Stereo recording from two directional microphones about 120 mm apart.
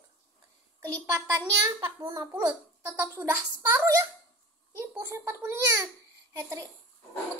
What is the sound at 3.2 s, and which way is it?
Speech, 20° right (ahead or behind).